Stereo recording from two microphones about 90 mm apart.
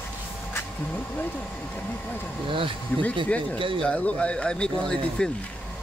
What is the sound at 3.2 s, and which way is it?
Speech, 15° left (ahead or behind).